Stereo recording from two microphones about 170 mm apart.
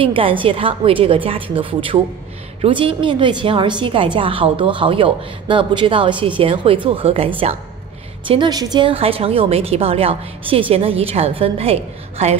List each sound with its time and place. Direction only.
0.0 s a woman's voice: 30° right (ahead or behind)